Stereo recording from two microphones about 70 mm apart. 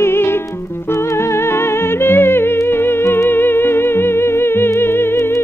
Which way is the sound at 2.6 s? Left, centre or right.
Left.